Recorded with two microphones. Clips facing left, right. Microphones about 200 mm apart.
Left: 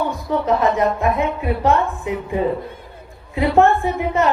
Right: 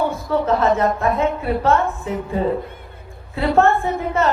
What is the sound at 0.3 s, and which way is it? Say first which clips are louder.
A woman's voice: even; 15° left (ahead or behind).